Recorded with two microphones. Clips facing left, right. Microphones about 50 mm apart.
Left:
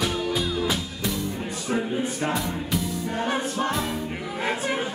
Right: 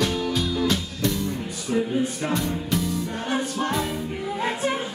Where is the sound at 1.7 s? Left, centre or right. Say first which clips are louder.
Right 3 dB; left.